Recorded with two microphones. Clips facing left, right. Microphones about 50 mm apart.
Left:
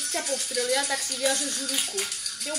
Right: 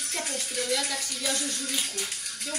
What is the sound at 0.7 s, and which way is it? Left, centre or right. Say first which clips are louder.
Speech: left 4 dB; left.